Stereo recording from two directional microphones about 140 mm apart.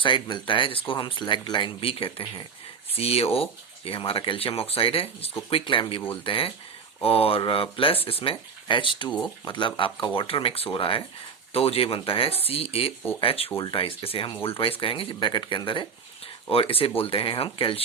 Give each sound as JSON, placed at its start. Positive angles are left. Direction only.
{"t": 0.0, "sound": "speech", "side_deg": 35}